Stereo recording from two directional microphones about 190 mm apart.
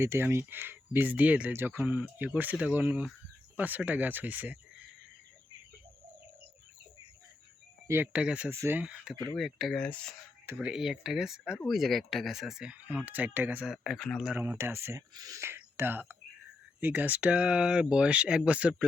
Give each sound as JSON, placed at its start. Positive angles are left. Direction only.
{"t": 0.0, "sound": "speech", "side_deg": -15}
{"t": 7.9, "sound": "speech", "side_deg": -10}
{"t": 10.4, "sound": "speech", "side_deg": -5}
{"t": 13.8, "sound": "speech", "side_deg": 0}